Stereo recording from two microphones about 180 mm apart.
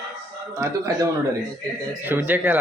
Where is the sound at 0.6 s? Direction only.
20° right (ahead or behind).